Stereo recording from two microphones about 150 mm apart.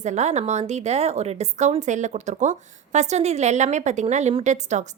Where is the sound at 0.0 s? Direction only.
50° right (ahead or behind).